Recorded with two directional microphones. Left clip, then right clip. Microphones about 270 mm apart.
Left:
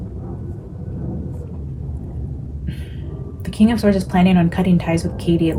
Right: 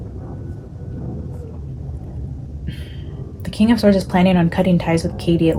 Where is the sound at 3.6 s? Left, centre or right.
Right.